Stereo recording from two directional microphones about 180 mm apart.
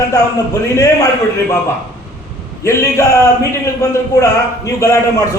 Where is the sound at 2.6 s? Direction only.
15° left (ahead or behind).